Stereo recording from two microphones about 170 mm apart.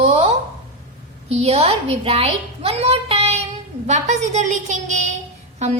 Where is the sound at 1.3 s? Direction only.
35° right (ahead or behind).